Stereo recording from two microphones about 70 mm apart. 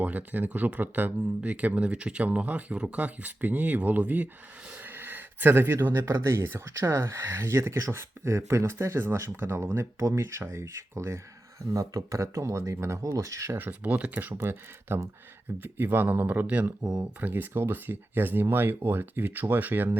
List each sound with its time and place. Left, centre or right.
0.0 s speech: right
4.7 s a sound: right
6.1 s speech: right
11.7 s speech: right
13.6 s speech: right
14.3 s speech: right